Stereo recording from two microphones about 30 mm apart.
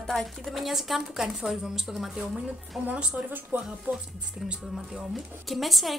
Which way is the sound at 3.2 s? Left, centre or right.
Right.